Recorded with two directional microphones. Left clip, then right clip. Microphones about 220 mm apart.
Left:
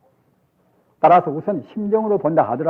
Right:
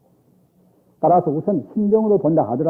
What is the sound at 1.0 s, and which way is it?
A man's voice, 35° right (ahead or behind).